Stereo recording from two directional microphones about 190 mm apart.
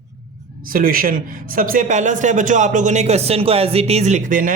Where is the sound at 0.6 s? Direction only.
50° right (ahead or behind).